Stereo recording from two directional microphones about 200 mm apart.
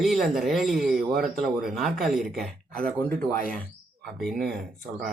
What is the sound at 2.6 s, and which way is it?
Speech, 45° right (ahead or behind).